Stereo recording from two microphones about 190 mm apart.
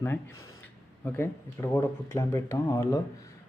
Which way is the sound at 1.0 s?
10° left (ahead or behind).